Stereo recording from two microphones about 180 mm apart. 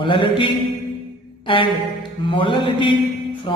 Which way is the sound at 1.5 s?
30° left (ahead or behind).